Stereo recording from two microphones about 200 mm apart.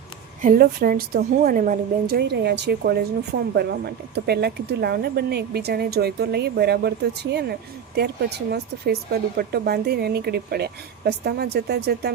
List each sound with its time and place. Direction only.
0.4 s a woman's voice: 45° right (ahead or behind)